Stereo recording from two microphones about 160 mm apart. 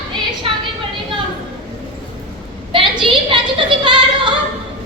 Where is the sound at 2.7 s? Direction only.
30° right (ahead or behind).